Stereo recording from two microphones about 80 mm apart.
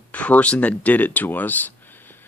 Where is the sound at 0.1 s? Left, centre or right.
Centre.